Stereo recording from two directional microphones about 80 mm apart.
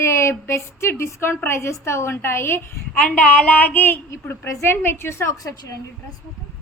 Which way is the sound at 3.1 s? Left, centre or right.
Centre.